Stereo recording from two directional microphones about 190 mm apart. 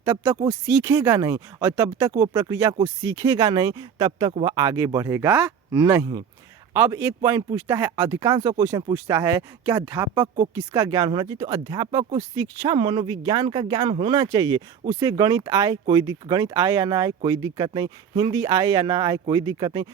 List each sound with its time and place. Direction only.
0.0 s speech: 15° right (ahead or behind)